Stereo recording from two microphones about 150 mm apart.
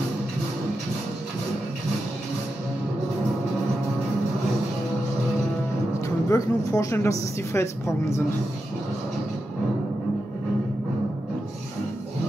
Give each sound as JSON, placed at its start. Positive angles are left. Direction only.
{"t": 5.9, "sound": "a woman's voice", "side_deg": 20}